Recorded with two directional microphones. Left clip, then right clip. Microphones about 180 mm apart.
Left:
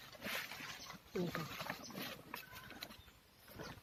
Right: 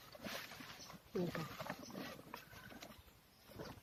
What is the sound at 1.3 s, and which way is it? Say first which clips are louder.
Wild animals: left 2 dB; centre (ahead or behind).